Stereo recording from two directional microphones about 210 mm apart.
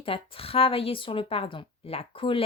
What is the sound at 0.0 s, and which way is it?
Speech, 25° left (ahead or behind).